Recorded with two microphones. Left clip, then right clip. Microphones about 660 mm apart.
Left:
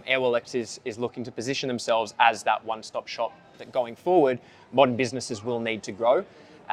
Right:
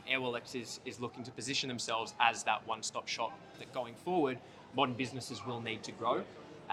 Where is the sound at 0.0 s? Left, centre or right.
Left.